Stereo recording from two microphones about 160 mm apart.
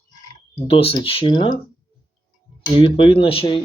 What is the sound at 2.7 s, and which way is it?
Speech, 35° left (ahead or behind).